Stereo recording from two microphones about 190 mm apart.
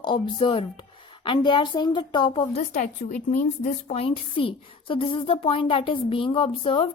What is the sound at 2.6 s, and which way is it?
A woman's voice, 40° left (ahead or behind).